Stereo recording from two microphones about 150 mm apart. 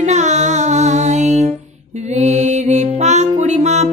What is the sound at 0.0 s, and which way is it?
Music, 50° right (ahead or behind).